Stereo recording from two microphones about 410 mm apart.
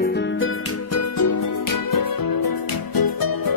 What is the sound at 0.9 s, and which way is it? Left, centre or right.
Music, left.